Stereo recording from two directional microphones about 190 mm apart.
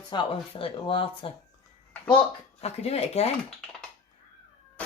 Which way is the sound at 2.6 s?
35° left (ahead or behind).